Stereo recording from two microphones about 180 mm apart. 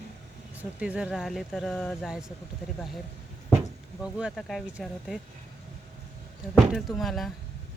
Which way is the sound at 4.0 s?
5° right (ahead or behind).